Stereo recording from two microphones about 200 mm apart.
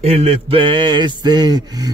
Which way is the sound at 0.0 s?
30° right (ahead or behind).